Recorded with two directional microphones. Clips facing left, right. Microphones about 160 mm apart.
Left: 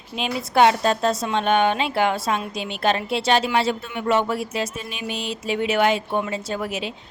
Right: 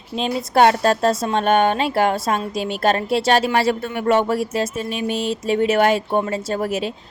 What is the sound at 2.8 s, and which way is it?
Speech, 45° right (ahead or behind).